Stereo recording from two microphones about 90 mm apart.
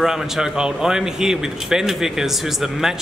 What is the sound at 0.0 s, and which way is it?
Speech, 5° right (ahead or behind).